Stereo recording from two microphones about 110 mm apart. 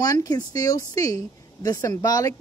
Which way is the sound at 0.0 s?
35° left (ahead or behind).